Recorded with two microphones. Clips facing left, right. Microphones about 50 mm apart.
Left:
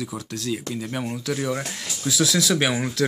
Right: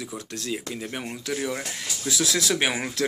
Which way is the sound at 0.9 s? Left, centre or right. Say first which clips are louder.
Left 4 dB; centre.